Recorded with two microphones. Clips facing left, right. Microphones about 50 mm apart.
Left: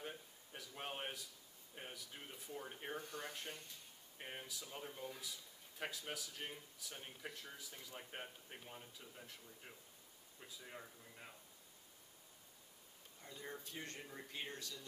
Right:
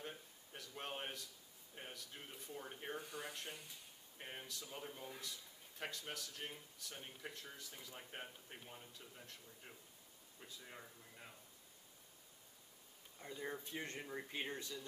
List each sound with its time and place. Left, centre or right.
0.0 s a sound: centre
1.8 s speech: centre
13.2 s speech: centre